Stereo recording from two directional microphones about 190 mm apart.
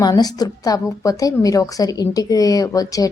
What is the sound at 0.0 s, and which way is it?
A woman's voice, 20° left (ahead or behind).